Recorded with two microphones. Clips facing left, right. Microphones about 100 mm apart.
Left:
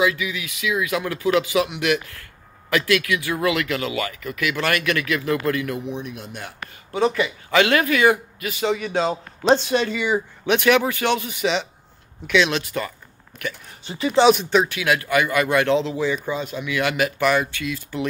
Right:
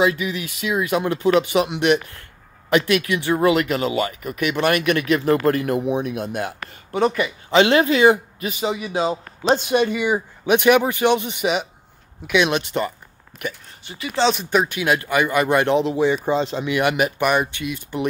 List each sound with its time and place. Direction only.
0.0 s speech: 35° right (ahead or behind)
5.9 s speech: 55° right (ahead or behind)
6.6 s a sound: 40° right (ahead or behind)
7.5 s a man's voice: 25° right (ahead or behind); by 9.6 s centre (ahead or behind)
9.6 s speech: 15° right (ahead or behind)
13.8 s speech: 30° left (ahead or behind)
14.3 s speech: 5° right (ahead or behind)
14.8 s speech: 20° right (ahead or behind)